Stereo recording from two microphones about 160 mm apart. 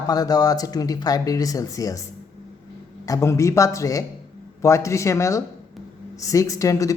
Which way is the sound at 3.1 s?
20° left (ahead or behind).